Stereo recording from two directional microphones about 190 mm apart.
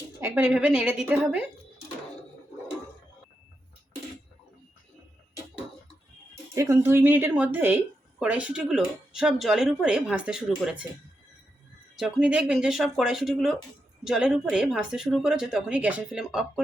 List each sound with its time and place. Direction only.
0.2 s speech: 10° right (ahead or behind)
6.5 s speech: 15° right (ahead or behind)
11.9 s speech: 5° right (ahead or behind)